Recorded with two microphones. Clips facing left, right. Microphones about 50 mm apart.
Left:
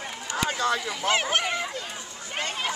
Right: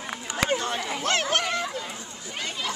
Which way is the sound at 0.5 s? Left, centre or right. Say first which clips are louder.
Left 3 dB; left.